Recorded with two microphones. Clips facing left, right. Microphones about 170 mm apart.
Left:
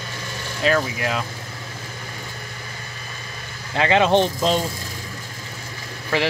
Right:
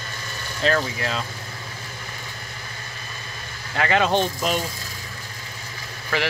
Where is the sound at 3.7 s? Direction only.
20° left (ahead or behind).